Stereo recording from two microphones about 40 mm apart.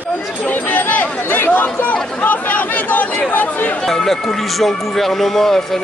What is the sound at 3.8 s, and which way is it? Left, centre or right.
Speech, centre.